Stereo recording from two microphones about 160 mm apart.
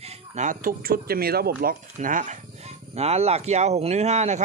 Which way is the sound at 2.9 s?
40° right (ahead or behind).